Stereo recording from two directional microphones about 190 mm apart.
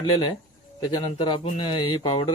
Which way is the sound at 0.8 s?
25° left (ahead or behind).